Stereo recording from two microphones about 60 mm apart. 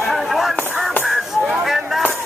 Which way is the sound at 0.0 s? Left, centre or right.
Centre.